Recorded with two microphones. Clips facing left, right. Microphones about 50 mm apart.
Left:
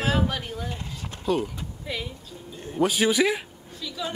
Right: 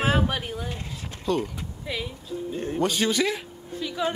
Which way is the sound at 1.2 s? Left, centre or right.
Centre.